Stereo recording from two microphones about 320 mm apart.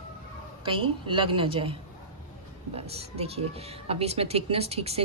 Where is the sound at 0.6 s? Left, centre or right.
Centre.